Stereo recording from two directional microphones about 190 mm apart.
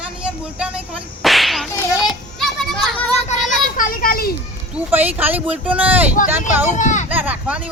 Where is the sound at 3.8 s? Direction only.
50° left (ahead or behind).